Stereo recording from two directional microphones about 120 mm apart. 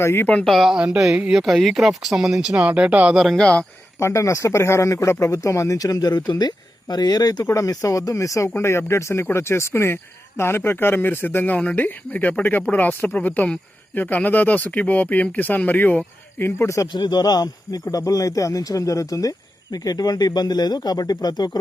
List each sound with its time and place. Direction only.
0.0 s speech: 20° left (ahead or behind)
0.4 s speech: centre (ahead or behind)
3.3 s speech: 10° left (ahead or behind)
4.0 s speech: 25° left (ahead or behind)